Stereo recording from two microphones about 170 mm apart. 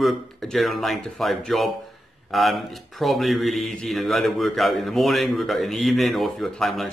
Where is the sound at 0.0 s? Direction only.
Centre (ahead or behind).